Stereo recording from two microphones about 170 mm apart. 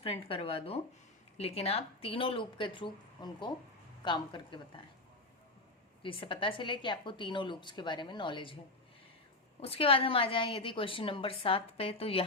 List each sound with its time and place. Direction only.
0.0 s a woman's voice: 35° left (ahead or behind)
6.0 s a woman's voice: 30° left (ahead or behind)
9.6 s a woman's voice: 35° left (ahead or behind)